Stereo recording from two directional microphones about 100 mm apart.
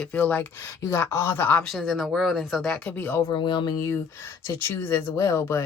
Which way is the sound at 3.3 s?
50° left (ahead or behind).